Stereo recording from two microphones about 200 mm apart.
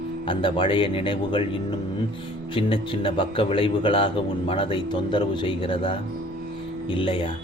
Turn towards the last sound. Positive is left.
turn(degrees=25)  # may be behind; listen again after turning